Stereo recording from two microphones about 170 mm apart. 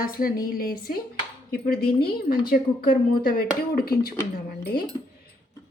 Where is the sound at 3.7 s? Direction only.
65° left (ahead or behind).